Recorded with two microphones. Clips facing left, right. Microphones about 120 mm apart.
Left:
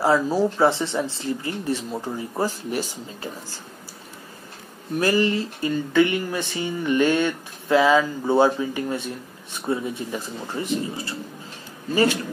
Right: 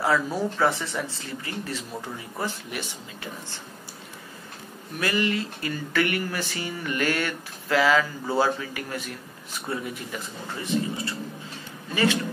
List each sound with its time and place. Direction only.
0.0 s speech: 30° left (ahead or behind)
4.9 s speech: 30° left (ahead or behind)
11.9 s a man's voice: 35° left (ahead or behind)